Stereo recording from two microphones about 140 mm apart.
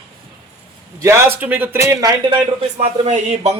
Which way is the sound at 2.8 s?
50° right (ahead or behind).